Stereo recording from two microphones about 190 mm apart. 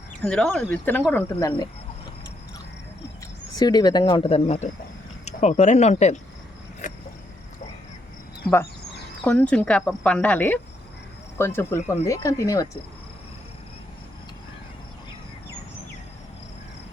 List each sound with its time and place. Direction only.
0.3 s speech: 5° left (ahead or behind)
3.5 s speech: 20° left (ahead or behind); by 6.1 s 35° left (ahead or behind)
6.8 s a sound: 40° left (ahead or behind)
9.2 s speech: 5° left (ahead or behind)